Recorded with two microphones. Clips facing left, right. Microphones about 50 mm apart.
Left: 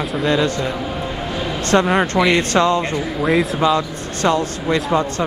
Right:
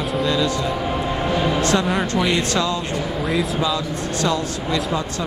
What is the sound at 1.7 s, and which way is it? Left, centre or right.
Speech, left.